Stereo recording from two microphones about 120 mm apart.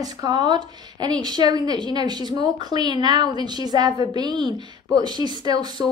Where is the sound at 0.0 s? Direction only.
35° right (ahead or behind).